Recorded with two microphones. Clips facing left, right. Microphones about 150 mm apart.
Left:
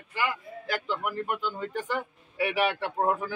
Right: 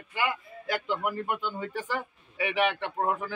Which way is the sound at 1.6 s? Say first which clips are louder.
Left 1 dB; 5° right (ahead or behind).